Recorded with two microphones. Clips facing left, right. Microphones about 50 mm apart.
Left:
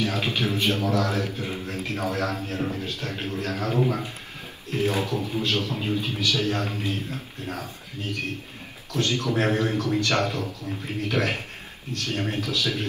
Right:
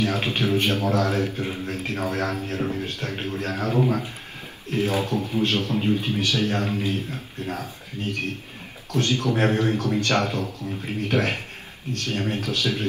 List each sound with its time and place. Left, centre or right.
0.0 s speech: right